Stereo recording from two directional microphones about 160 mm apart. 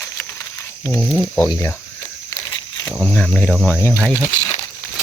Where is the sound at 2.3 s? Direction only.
20° left (ahead or behind).